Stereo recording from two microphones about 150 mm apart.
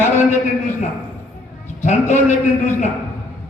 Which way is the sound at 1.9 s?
55° left (ahead or behind).